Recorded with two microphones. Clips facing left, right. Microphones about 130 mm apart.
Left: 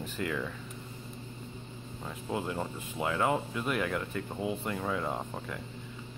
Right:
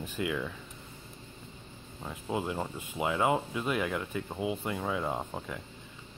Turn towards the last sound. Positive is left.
turn(degrees=-10)  # may be behind; listen again after turning